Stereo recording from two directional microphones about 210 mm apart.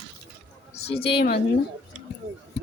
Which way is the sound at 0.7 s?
30° left (ahead or behind).